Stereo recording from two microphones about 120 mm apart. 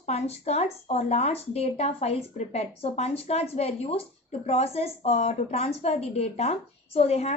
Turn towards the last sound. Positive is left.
turn(degrees=60)  # may be behind; listen again after turning